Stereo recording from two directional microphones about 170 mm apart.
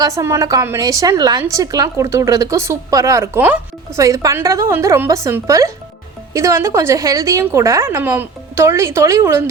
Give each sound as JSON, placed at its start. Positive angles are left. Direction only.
{"t": 0.0, "sound": "a woman's voice", "side_deg": -20}